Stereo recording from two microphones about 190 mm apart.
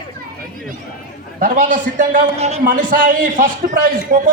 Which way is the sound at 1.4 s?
45° right (ahead or behind).